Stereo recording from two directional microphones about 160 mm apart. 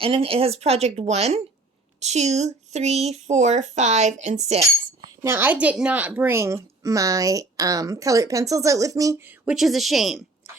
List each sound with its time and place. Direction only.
0.0 s speech: 35° right (ahead or behind)
4.6 s speech: 20° right (ahead or behind)
9.4 s a woman's voice: 5° right (ahead or behind)